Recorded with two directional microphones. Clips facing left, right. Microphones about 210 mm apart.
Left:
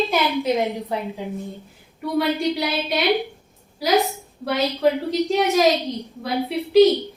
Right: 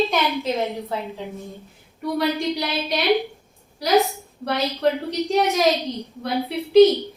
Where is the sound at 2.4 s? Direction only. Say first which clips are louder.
Left 2 dB; centre (ahead or behind).